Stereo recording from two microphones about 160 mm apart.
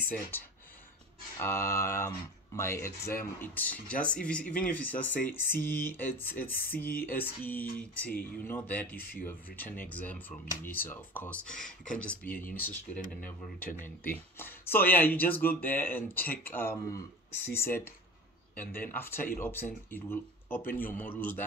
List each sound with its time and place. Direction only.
0.3 s speech: 15° left (ahead or behind)